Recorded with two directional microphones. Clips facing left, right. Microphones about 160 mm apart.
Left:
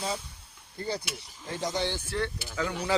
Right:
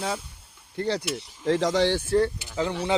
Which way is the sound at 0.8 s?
80° right.